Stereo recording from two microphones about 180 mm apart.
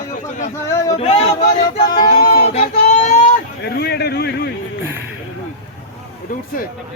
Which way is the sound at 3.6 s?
60° left (ahead or behind).